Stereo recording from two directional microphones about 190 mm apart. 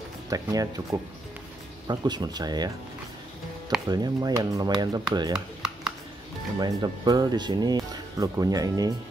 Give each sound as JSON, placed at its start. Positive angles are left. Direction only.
{"t": 0.3, "sound": "speech", "side_deg": -20}
{"t": 3.8, "sound": "speech", "side_deg": -20}
{"t": 6.6, "sound": "speech", "side_deg": -20}